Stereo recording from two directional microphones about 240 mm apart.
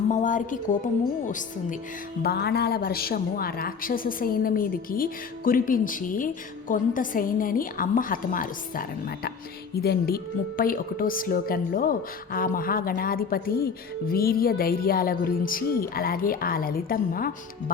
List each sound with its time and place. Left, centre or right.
0.1 s a woman's voice: left